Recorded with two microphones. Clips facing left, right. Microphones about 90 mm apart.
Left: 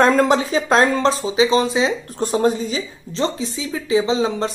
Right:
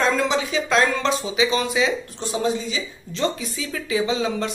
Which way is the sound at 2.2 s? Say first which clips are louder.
Left 6 dB; 45° left (ahead or behind).